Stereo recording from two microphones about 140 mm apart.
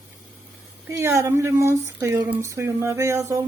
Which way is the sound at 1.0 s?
20° right (ahead or behind).